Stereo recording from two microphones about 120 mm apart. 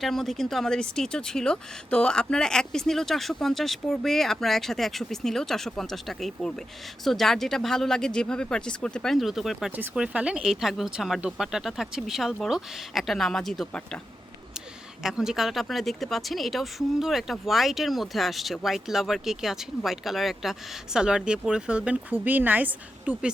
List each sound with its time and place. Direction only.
0.0 s speech: centre (ahead or behind)
15.0 s speech: 5° right (ahead or behind)